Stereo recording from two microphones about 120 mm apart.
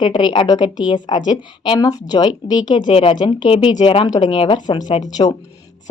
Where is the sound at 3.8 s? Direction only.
50° left (ahead or behind).